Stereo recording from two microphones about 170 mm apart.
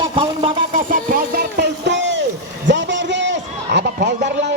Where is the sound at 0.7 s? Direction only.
55° right (ahead or behind).